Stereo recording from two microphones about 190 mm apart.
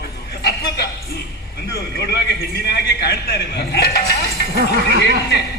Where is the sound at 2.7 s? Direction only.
60° left (ahead or behind).